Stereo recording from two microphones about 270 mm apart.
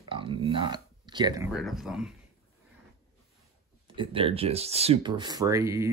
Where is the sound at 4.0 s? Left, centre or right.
Centre.